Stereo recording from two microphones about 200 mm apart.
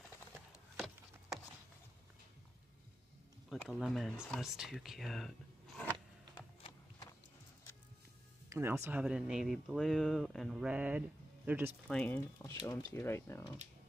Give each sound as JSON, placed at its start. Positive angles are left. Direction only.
{"t": 0.5, "sound": "a sound", "side_deg": 0}
{"t": 3.4, "sound": "speech", "side_deg": 0}
{"t": 8.5, "sound": "speech", "side_deg": -15}
{"t": 11.9, "sound": "speech", "side_deg": 5}